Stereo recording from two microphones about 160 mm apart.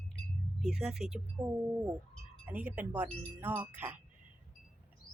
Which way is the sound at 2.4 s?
10° right (ahead or behind).